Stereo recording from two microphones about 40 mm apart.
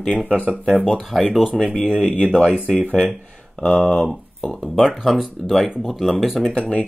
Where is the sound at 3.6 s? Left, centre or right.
Left.